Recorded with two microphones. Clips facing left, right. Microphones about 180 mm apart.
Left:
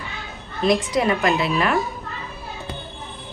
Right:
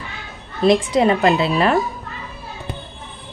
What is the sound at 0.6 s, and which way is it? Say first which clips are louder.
A woman's voice: right 4 dB; 30° right (ahead or behind).